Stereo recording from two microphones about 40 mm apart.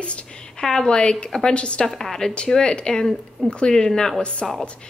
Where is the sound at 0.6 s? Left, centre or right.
Centre.